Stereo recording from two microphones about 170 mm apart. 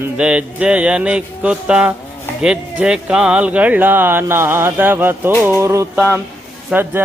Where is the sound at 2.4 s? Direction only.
5° right (ahead or behind).